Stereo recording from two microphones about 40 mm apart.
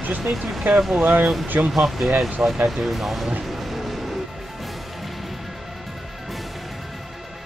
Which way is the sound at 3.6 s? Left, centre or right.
Centre.